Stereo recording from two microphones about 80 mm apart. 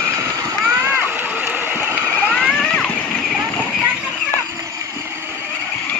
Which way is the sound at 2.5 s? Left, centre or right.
Centre.